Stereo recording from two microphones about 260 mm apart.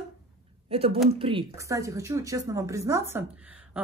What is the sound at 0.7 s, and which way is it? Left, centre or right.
Speech, right.